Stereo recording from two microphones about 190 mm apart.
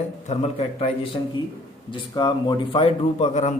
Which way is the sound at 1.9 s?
25° left (ahead or behind).